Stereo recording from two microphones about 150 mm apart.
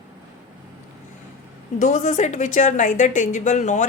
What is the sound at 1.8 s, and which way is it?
A woman's voice, 55° left (ahead or behind).